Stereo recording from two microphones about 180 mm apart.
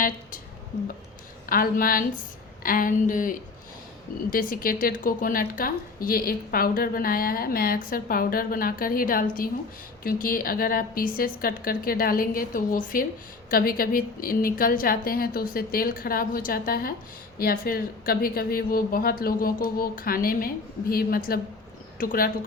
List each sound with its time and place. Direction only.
1.5 s a woman's voice: 50° left (ahead or behind)